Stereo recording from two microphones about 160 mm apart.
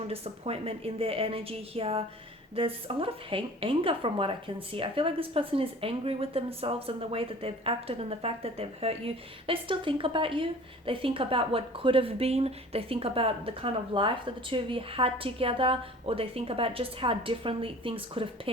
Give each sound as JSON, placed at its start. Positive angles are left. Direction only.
{"t": 0.1, "sound": "a woman's voice", "side_deg": -40}